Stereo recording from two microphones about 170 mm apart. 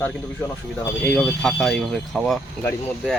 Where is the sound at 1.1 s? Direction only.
Centre (ahead or behind).